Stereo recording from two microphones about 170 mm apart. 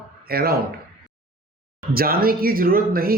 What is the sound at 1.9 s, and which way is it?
Speech, 60° right (ahead or behind).